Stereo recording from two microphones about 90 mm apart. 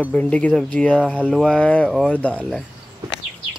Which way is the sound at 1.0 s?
15° right (ahead or behind).